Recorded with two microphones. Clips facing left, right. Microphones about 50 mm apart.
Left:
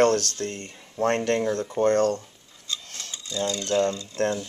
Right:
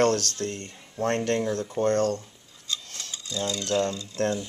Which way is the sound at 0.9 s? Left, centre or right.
Left.